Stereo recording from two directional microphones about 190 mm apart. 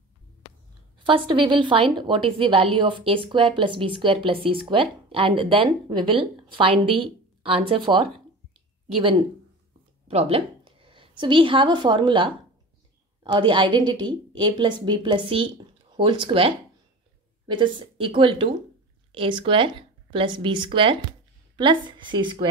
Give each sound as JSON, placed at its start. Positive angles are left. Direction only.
{"t": 0.9, "sound": "a woman's voice", "side_deg": -25}
{"t": 10.0, "sound": "a woman's voice", "side_deg": -30}